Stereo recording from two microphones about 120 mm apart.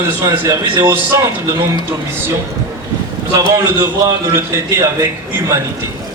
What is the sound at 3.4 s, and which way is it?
Speech, 30° right (ahead or behind).